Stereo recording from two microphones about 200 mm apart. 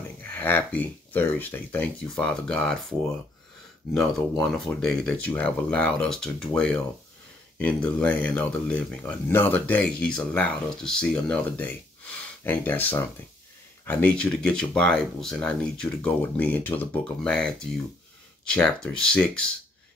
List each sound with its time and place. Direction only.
0.2 s speech: 10° left (ahead or behind)
3.9 s speech: centre (ahead or behind)